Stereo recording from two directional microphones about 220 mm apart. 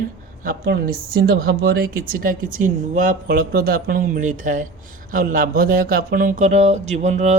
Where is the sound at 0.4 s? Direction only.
45° right (ahead or behind).